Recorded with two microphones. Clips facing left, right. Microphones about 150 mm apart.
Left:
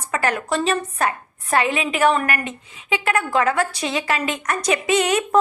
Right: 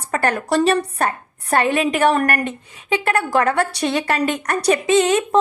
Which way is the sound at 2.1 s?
45° right (ahead or behind).